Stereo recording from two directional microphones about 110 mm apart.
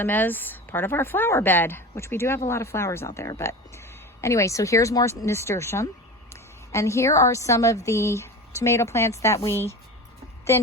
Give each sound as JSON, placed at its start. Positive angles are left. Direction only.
{"t": 0.0, "sound": "a woman's voice", "side_deg": 15}